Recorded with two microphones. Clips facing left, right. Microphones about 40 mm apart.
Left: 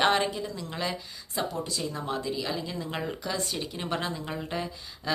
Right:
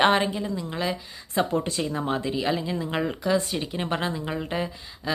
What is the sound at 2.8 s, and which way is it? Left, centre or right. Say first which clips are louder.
Speech: right 6 dB; centre.